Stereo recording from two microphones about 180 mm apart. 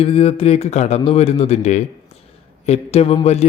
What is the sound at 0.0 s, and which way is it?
Speech, 35° left (ahead or behind).